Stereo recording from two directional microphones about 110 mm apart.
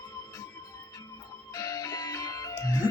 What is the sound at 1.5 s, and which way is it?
Music, 35° left (ahead or behind).